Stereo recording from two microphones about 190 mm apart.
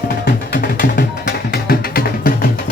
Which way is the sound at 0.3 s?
50° left (ahead or behind).